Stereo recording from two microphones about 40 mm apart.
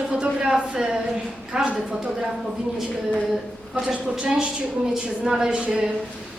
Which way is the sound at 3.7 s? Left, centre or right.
Right.